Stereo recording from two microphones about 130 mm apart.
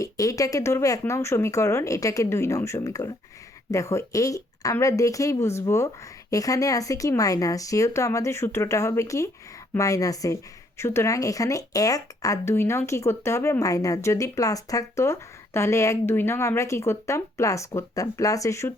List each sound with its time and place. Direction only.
0.0 s speech: 25° left (ahead or behind)